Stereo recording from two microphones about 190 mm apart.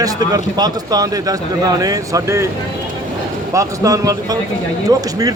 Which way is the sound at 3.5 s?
15° right (ahead or behind).